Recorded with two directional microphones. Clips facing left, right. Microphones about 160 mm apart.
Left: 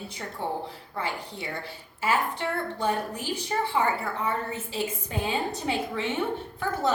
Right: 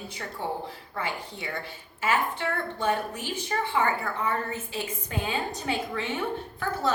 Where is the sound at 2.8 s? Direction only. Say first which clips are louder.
Right 1 dB; 35° left (ahead or behind).